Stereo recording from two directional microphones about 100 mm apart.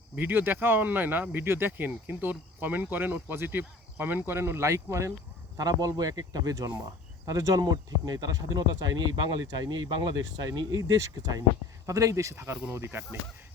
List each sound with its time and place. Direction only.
0.2 s speech: 20° right (ahead or behind)
5.5 s speech: 40° right (ahead or behind); by 13.1 s 25° right (ahead or behind)